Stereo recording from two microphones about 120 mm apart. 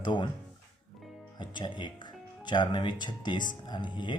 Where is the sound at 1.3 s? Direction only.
40° left (ahead or behind).